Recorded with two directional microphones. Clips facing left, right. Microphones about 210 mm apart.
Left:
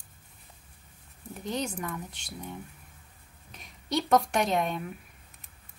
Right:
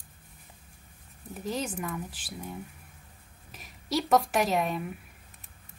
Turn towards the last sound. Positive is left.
turn(degrees=-5)  # may be behind; listen again after turning